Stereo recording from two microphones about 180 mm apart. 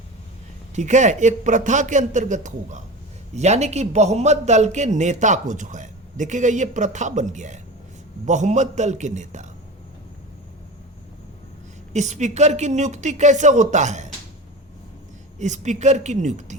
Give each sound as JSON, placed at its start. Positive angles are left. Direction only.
{"t": 0.8, "sound": "a man's voice", "side_deg": -40}
{"t": 11.9, "sound": "a man's voice", "side_deg": -40}
{"t": 15.4, "sound": "a man's voice", "side_deg": -40}